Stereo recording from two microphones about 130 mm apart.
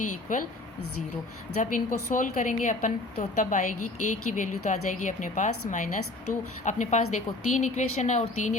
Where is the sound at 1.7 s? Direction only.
90° left.